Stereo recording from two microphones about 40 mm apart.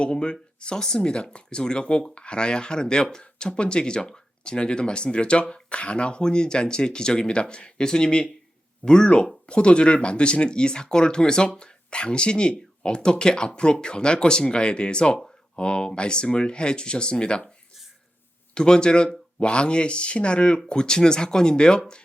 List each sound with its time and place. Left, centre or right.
0.0 s speech: left
18.5 s speech: left